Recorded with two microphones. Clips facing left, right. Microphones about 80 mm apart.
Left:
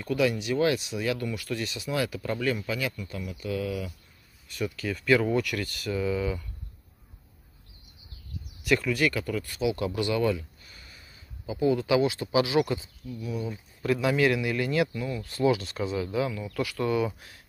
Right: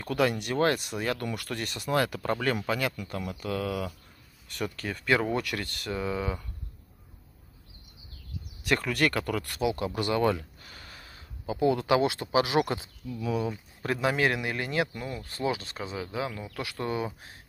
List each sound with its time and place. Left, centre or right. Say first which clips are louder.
0.0 s speech: left 1 dB; right
8.6 s speech: left 2 dB; right
9.9 s speech: even; right
10.6 s a sound: right 4 dB; right
11.6 s speech: left 1 dB; right
13.8 s speech: left 3 dB; right